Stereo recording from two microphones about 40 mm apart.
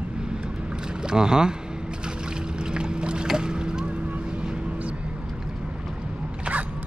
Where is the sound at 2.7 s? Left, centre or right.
Right.